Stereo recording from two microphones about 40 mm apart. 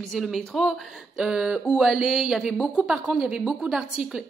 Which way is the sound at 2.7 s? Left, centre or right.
Right.